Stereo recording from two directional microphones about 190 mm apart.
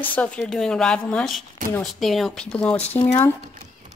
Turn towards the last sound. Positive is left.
turn(degrees=10)  # may be behind; listen again after turning